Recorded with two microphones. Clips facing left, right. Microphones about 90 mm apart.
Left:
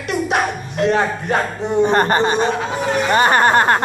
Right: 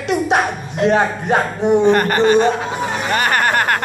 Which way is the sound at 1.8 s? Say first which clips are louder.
Left 3 dB; 30° left (ahead or behind).